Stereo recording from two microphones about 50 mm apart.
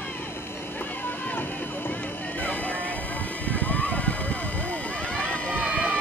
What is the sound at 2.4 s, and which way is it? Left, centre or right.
Vehicle, left.